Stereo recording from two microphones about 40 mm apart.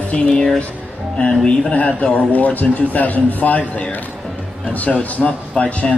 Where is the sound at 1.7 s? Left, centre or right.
Left.